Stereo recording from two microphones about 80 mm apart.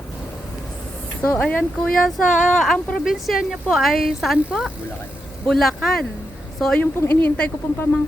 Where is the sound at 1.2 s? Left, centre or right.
Centre.